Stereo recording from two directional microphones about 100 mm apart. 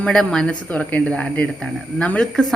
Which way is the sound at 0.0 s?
5° left (ahead or behind).